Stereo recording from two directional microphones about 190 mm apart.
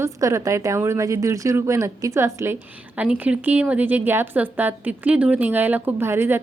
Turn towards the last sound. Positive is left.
turn(degrees=-10)  # may be behind; listen again after turning